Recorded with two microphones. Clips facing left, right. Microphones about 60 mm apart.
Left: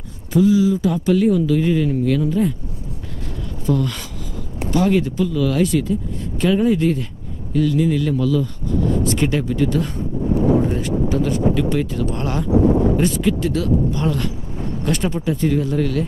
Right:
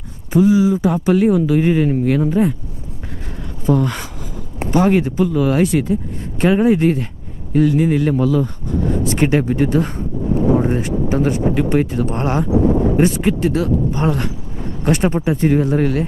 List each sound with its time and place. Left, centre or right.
0.3 s speech: right
3.7 s speech: right